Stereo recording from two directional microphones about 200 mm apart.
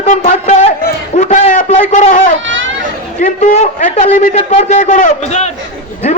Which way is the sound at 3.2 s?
40° left (ahead or behind).